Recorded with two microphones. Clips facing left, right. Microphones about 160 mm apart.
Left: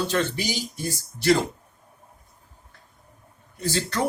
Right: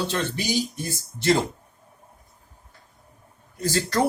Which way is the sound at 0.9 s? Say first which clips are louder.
Left 3 dB; 25° right (ahead or behind).